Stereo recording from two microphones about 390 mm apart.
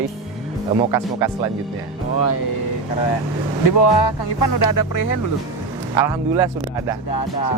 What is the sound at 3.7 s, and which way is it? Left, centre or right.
Speech, left.